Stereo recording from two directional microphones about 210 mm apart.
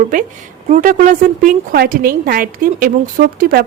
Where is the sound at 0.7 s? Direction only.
35° right (ahead or behind).